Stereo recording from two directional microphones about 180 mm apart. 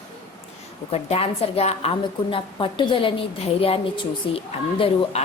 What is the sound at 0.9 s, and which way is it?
A woman's voice, 35° left (ahead or behind).